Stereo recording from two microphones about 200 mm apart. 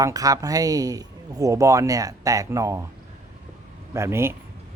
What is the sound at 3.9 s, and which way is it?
Speech, 15° right (ahead or behind).